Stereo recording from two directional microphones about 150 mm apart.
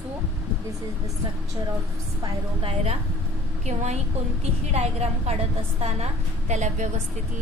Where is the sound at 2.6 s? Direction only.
45° right (ahead or behind).